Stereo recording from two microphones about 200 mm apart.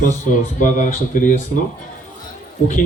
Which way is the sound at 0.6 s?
40° left (ahead or behind).